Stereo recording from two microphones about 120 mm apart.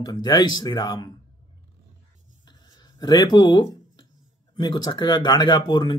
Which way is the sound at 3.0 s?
35° left (ahead or behind).